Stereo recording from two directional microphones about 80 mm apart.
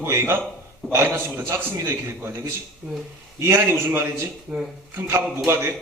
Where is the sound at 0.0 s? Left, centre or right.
Right.